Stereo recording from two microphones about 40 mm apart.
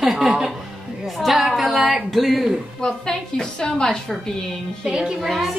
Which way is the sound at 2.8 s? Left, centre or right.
Centre.